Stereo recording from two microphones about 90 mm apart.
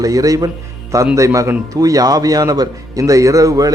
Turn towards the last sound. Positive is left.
turn(degrees=-40)  # may be behind; listen again after turning